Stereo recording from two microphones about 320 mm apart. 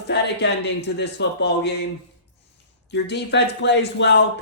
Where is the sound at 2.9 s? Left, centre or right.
Left.